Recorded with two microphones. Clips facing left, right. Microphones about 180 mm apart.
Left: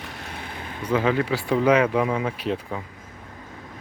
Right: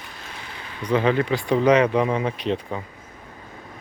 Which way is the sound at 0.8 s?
5° left (ahead or behind).